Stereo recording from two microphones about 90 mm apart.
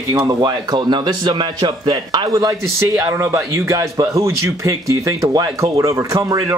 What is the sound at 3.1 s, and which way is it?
A man's voice, 30° right (ahead or behind).